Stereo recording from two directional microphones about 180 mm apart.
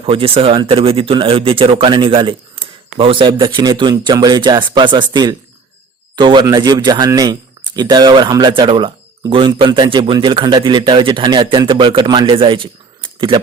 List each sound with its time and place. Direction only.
0.0 s speech: 30° right (ahead or behind)